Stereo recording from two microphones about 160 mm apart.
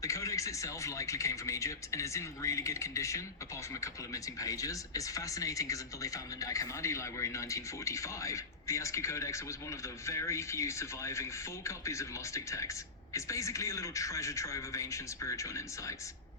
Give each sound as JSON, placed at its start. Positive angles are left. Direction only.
{"t": 0.0, "sound": "speech", "side_deg": 20}